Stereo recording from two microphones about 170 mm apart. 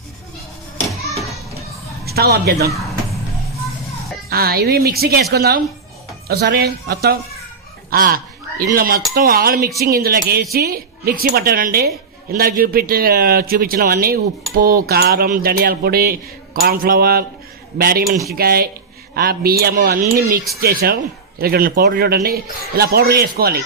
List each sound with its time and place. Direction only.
1.1 s children playing: centre (ahead or behind)
2.0 s a woman's voice: 65° right (ahead or behind)
4.3 s a man's voice: 65° right (ahead or behind)